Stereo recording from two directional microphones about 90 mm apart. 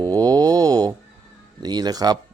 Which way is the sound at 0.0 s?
45° right (ahead or behind).